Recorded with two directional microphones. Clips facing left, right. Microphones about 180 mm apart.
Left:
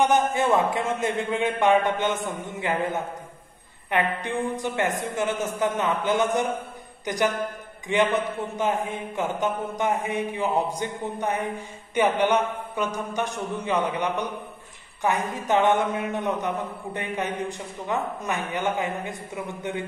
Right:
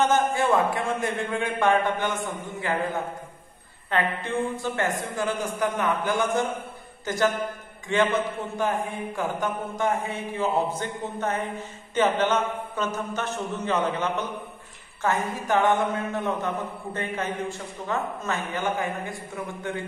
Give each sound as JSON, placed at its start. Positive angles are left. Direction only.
{"t": 0.0, "sound": "a man's voice", "side_deg": 20}